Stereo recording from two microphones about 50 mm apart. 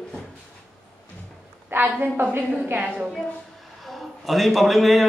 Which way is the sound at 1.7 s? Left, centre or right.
Right.